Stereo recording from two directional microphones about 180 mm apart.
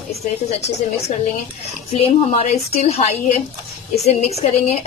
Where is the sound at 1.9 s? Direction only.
35° left (ahead or behind).